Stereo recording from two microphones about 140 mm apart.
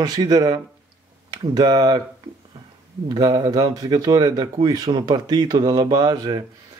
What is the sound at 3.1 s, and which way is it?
Speech, 30° right (ahead or behind).